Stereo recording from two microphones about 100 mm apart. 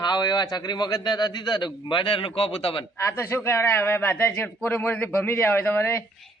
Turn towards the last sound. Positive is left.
turn(degrees=25)  # may be behind; listen again after turning